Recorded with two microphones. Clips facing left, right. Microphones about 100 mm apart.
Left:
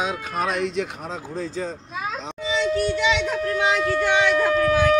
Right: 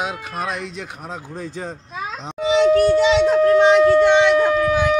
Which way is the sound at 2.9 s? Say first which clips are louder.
Right 8 dB; 35° right (ahead or behind).